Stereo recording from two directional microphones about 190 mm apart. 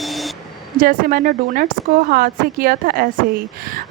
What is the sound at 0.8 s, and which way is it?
Speech, 50° right (ahead or behind).